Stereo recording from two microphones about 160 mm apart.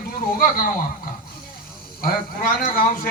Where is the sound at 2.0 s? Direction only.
65° left (ahead or behind).